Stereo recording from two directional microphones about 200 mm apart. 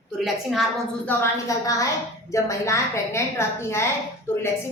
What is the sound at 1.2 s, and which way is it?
A woman's voice, 15° left (ahead or behind).